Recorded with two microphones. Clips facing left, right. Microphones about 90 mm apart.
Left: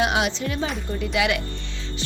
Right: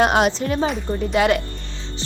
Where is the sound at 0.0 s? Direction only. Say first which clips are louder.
Right 5 dB; 45° right (ahead or behind).